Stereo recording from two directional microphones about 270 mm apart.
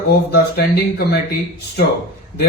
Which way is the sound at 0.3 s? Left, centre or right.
Left.